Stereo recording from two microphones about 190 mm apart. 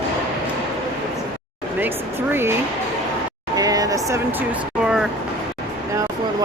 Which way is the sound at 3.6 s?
20° right (ahead or behind).